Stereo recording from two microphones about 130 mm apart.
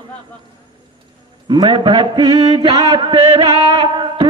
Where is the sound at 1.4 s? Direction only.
35° right (ahead or behind).